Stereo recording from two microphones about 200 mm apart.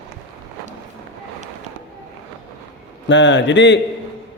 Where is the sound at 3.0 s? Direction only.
65° left (ahead or behind).